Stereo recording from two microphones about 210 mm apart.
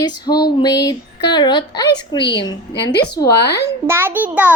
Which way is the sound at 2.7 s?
50° left (ahead or behind).